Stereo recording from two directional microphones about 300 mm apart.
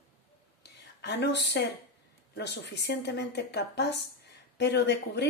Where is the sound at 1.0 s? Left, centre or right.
Left.